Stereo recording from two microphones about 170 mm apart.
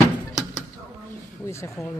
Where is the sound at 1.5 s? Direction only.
15° left (ahead or behind).